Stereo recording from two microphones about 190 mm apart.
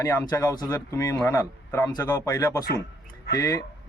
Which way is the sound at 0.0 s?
15° left (ahead or behind).